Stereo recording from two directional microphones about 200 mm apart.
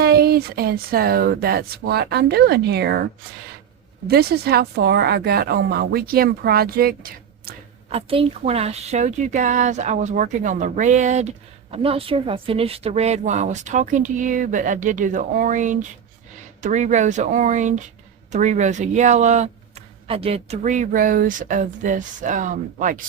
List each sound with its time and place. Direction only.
0.0 s speech: 50° right (ahead or behind)
7.9 s a woman's voice: 30° right (ahead or behind)